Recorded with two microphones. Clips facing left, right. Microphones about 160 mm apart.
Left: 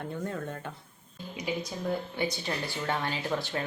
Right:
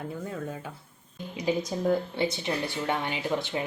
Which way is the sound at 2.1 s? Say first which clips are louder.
Right 3 dB; 25° right (ahead or behind).